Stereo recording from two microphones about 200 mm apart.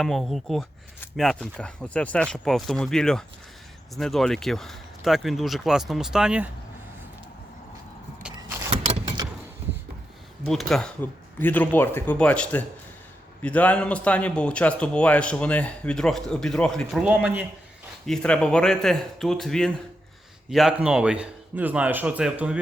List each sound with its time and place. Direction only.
0.0 s a man's voice: centre (ahead or behind)
8.7 s vehicle: 30° right (ahead or behind)
10.4 s a man's voice: centre (ahead or behind)
18.0 s a man's voice: 5° left (ahead or behind)